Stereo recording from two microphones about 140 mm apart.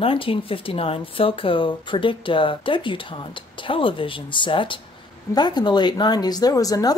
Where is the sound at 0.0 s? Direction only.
40° left (ahead or behind).